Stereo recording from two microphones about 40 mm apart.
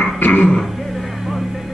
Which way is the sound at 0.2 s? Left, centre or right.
Left.